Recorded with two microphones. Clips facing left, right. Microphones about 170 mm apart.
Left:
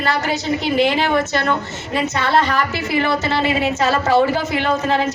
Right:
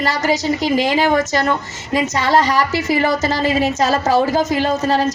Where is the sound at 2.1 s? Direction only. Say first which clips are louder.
Right 2 dB; 40° right (ahead or behind).